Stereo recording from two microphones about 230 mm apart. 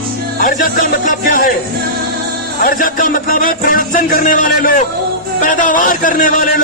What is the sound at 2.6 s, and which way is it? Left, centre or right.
Music, left.